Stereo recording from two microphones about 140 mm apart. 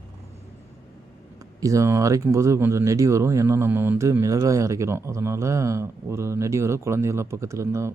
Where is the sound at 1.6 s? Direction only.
25° right (ahead or behind).